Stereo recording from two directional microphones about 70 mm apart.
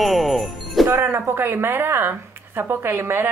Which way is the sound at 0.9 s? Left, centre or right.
Right.